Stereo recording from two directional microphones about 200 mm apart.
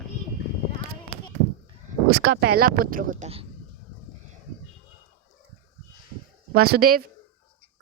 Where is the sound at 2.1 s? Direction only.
55° right (ahead or behind).